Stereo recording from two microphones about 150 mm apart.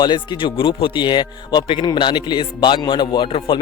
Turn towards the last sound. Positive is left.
turn(degrees=35)  # may be behind; listen again after turning